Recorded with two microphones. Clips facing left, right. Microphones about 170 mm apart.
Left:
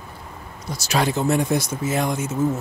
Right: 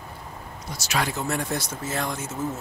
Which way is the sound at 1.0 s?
25° left (ahead or behind).